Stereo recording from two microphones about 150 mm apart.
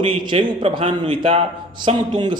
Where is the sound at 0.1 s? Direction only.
35° right (ahead or behind).